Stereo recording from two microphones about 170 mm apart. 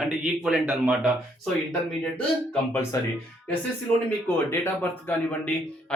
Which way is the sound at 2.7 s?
15° left (ahead or behind).